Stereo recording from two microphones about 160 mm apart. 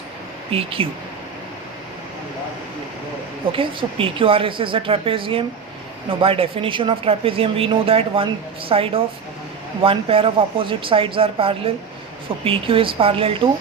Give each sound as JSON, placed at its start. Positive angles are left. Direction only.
{"t": 0.5, "sound": "speech", "side_deg": -35}
{"t": 3.5, "sound": "speech", "side_deg": -35}